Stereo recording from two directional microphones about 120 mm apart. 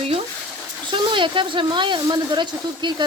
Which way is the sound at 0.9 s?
45° right (ahead or behind).